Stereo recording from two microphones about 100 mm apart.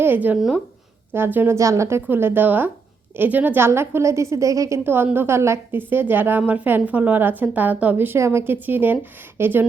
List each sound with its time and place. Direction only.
0.0 s a woman's voice: 20° right (ahead or behind)